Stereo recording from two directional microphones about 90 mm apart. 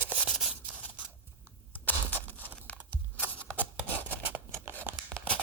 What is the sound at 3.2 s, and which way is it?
Scissors, 15° left (ahead or behind).